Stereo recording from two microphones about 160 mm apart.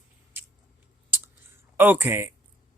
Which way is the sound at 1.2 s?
15° right (ahead or behind).